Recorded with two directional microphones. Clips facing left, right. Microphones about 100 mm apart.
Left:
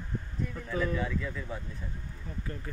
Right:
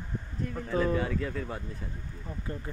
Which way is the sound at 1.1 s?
55° right (ahead or behind).